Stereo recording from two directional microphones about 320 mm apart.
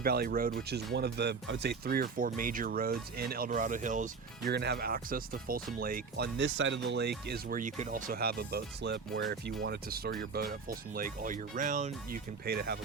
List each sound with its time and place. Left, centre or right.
0.0 s speech: right